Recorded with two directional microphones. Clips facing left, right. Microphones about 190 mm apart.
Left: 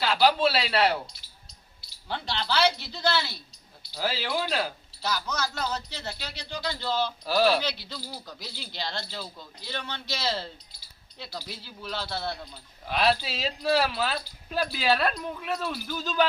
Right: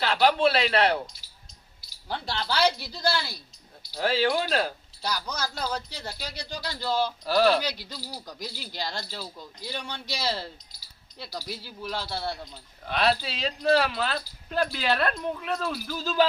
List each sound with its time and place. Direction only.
0.0 s speech: 5° left (ahead or behind)
2.0 s speech: 10° right (ahead or behind)
4.0 s speech: 5° left (ahead or behind)
5.0 s speech: 10° right (ahead or behind)
7.3 s speech: centre (ahead or behind)
7.9 s speech: 10° right (ahead or behind)
12.9 s speech: 5° left (ahead or behind)